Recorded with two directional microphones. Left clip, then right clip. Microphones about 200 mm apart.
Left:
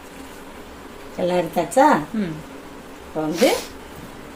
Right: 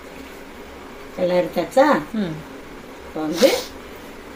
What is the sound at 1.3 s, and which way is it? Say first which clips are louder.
Speech: right 1 dB; 30° left (ahead or behind).